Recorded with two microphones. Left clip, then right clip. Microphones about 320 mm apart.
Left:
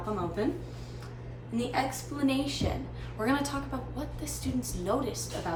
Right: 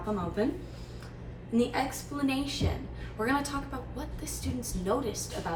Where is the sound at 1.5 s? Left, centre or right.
Centre.